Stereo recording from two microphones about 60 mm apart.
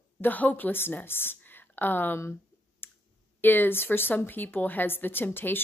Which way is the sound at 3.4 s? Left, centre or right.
Left.